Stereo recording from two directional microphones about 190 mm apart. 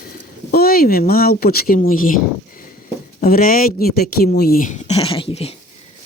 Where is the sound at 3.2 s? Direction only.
50° left (ahead or behind); by 5.6 s 30° left (ahead or behind).